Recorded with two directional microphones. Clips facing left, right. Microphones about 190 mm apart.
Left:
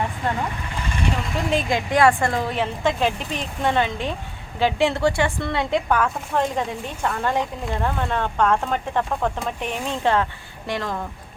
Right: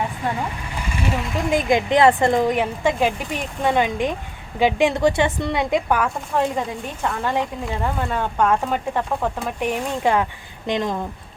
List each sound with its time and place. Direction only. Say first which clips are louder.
0.9 s speech: right 1 dB; 5° right (ahead or behind)
1.5 s a woman's voice: right 4 dB; 20° right (ahead or behind)